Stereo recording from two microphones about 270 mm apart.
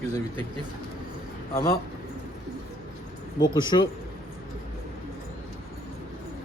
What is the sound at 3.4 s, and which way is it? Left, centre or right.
Speech, centre.